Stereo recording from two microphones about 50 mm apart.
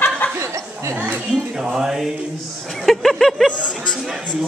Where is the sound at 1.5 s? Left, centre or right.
Centre.